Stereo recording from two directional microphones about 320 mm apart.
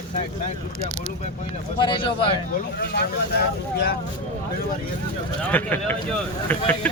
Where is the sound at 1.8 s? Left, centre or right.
Centre.